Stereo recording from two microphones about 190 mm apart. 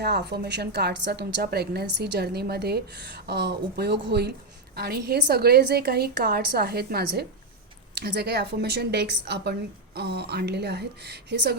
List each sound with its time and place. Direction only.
0.0 s a woman's voice: 60° right (ahead or behind)